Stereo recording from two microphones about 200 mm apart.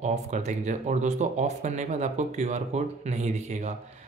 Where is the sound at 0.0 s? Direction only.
35° right (ahead or behind).